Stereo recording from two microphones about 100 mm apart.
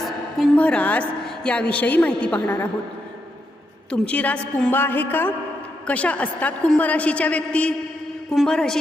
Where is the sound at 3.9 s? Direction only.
15° left (ahead or behind).